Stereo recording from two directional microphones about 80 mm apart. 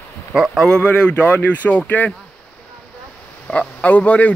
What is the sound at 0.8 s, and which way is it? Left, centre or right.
Speech, centre.